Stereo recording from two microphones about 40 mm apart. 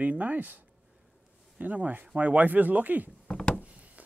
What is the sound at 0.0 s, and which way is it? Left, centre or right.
Speech, right.